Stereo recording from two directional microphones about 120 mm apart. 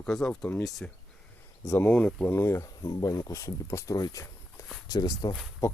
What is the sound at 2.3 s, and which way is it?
Speech, 20° left (ahead or behind).